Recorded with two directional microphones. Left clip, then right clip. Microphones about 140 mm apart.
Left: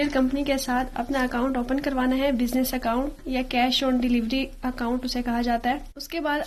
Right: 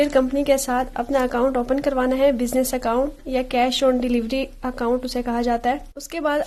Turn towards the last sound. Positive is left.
turn(degrees=-40)  # may be behind; listen again after turning